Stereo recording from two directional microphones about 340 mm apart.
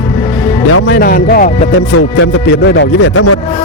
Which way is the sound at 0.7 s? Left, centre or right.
Left.